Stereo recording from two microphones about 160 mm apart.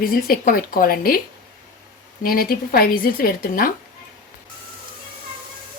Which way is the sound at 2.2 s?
65° left (ahead or behind).